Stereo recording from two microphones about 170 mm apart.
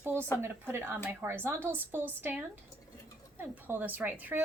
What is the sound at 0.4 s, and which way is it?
A woman's voice, 15° right (ahead or behind).